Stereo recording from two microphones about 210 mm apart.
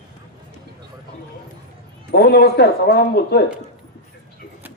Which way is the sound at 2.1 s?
50° left (ahead or behind).